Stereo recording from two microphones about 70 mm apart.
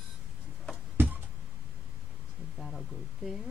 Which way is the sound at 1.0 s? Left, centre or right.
Right.